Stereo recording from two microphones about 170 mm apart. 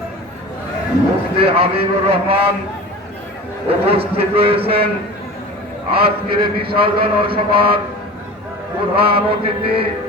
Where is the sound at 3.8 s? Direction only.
35° right (ahead or behind).